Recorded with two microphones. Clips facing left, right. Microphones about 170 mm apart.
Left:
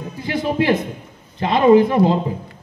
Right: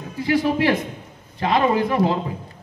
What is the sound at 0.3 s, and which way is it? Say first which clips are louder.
A man's voice: even; 25° left (ahead or behind).